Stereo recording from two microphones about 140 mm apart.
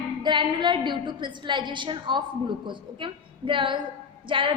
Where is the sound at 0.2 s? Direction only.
35° right (ahead or behind).